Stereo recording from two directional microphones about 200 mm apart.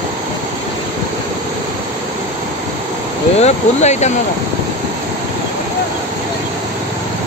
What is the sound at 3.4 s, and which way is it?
Speech, 35° left (ahead or behind).